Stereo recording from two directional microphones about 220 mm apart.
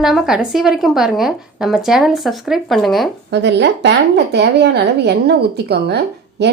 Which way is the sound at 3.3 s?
50° right (ahead or behind).